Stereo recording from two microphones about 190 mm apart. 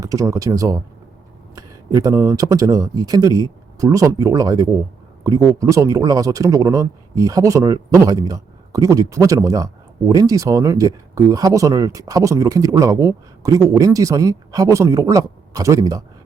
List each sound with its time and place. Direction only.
0.0 s speech: 15° right (ahead or behind)